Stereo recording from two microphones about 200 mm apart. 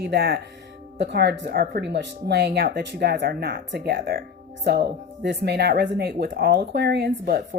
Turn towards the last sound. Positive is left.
turn(degrees=-50)  # may be behind; listen again after turning